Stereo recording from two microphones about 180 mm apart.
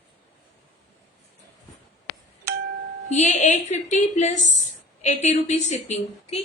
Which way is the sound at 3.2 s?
40° left (ahead or behind).